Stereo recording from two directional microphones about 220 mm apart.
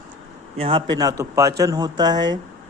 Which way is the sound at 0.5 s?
25° right (ahead or behind).